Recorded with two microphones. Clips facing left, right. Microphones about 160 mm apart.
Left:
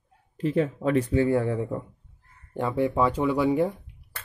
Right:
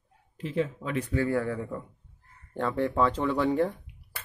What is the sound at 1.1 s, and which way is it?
Speech, 20° left (ahead or behind).